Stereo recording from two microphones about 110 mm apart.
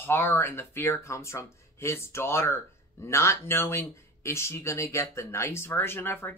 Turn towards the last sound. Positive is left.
turn(degrees=20)  # may be behind; listen again after turning